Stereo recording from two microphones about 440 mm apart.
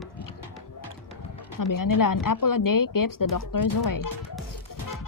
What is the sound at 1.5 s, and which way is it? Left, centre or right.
Speech, left.